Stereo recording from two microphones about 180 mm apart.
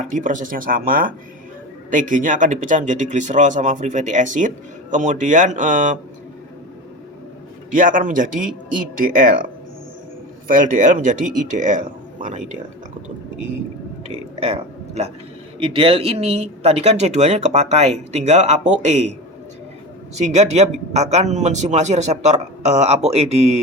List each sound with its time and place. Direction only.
0.1 s speech: 45° right (ahead or behind)
7.7 s speech: 45° right (ahead or behind)
10.5 s speech: 45° right (ahead or behind)
14.1 s a sound: 35° right (ahead or behind)
15.5 s speech: 30° right (ahead or behind)
20.1 s speech: 40° right (ahead or behind)